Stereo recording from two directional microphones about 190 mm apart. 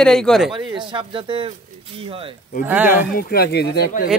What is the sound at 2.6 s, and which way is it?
Speech, 10° right (ahead or behind).